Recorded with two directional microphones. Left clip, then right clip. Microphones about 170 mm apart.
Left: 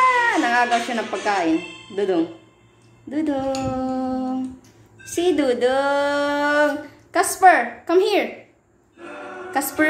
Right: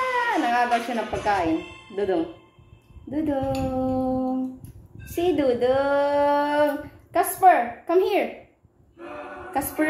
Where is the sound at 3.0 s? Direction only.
5° right (ahead or behind).